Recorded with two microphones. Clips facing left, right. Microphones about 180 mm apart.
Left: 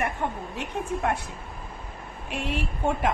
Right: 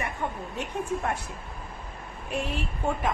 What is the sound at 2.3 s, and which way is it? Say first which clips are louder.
Speech: left 1 dB; 75° left (ahead or behind).